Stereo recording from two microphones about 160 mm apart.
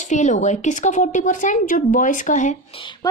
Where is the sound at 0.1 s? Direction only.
50° left (ahead or behind).